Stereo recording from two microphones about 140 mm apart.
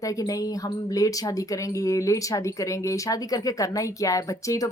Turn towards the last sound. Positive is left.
turn(degrees=25)  # may be behind; listen again after turning